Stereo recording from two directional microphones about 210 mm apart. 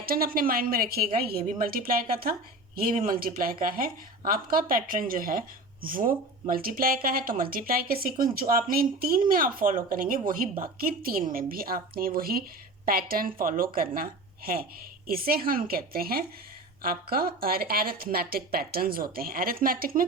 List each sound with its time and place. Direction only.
0.0 s a woman's voice: 45° right (ahead or behind)